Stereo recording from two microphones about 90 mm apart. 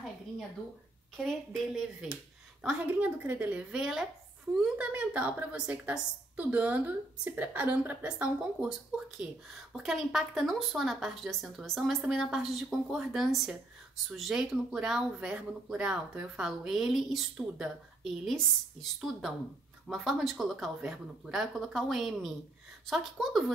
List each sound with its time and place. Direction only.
1.1 s a woman's voice: centre (ahead or behind)
2.9 s a woman's voice: 20° right (ahead or behind)
3.8 s a woman's voice: 5° right (ahead or behind)